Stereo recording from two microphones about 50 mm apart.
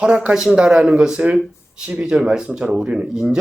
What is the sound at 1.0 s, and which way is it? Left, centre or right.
Speech, centre.